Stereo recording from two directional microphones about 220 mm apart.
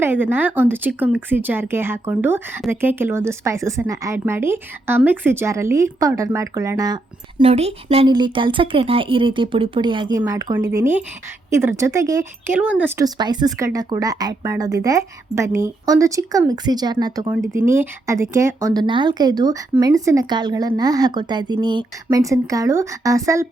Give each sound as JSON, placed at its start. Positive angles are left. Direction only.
{"t": 0.0, "sound": "a woman's voice", "side_deg": -10}